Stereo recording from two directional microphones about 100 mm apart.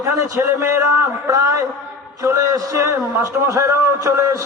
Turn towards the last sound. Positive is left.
turn(degrees=-30)  # may be behind; listen again after turning